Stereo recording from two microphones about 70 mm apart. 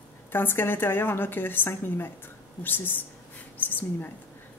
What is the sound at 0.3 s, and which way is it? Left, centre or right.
A woman's voice, left.